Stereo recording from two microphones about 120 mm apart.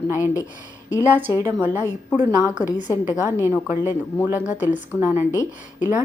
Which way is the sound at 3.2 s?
20° right (ahead or behind).